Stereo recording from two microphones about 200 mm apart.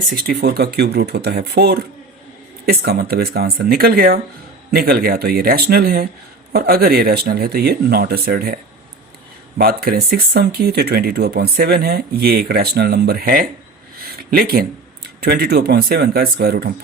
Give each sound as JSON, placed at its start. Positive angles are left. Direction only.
{"t": 0.1, "sound": "speech", "side_deg": -50}
{"t": 9.6, "sound": "speech", "side_deg": -50}